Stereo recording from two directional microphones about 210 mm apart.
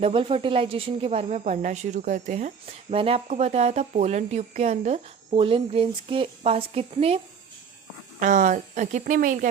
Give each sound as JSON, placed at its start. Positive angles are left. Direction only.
{"t": 0.0, "sound": "speech", "side_deg": -25}
{"t": 8.2, "sound": "speech", "side_deg": -35}